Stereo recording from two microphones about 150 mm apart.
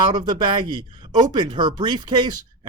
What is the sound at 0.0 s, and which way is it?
Speech, 30° right (ahead or behind).